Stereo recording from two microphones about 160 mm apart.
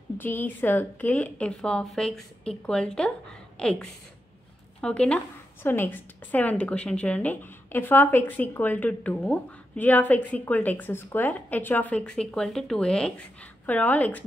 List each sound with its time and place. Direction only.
0.2 s a woman's voice: 10° left (ahead or behind)